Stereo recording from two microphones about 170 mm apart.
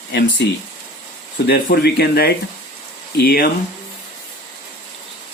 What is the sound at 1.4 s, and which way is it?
Speech, 70° left (ahead or behind).